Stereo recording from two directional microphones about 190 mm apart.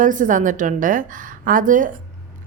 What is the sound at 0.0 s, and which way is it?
A woman's voice, 45° right (ahead or behind).